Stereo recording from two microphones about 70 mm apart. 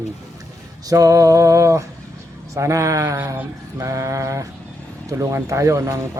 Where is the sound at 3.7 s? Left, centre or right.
Right.